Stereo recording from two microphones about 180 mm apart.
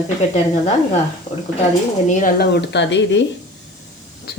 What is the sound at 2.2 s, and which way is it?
A woman's voice, 55° left (ahead or behind).